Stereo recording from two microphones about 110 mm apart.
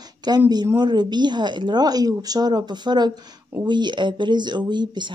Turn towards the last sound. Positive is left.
turn(degrees=-40)  # may be behind; listen again after turning